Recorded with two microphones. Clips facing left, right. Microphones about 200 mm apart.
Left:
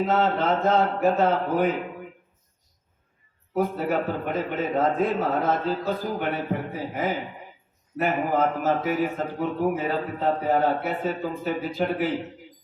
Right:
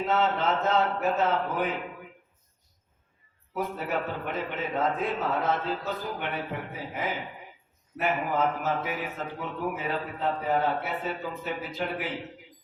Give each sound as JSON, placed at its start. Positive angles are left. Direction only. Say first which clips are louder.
{"t": 0.1, "sound": "a man's voice", "louder": "even", "side_deg": 40}
{"t": 3.5, "sound": "a man's voice", "louder": "left 6 dB", "side_deg": 40}